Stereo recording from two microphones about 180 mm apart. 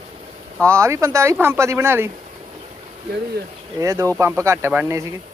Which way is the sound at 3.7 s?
20° right (ahead or behind).